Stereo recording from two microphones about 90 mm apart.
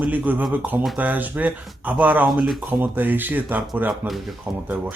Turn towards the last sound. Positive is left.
turn(degrees=-20)  # may be behind; listen again after turning